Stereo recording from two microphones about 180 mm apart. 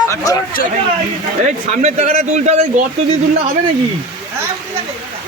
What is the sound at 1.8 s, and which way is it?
A man's voice, 40° right (ahead or behind).